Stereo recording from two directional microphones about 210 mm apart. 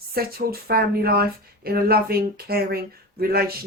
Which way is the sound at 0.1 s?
45° right (ahead or behind).